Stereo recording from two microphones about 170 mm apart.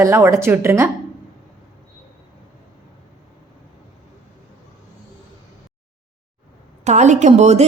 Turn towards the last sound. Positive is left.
turn(degrees=-40)  # may be behind; listen again after turning